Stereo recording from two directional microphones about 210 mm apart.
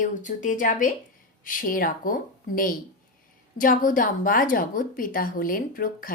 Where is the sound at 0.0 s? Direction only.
35° left (ahead or behind).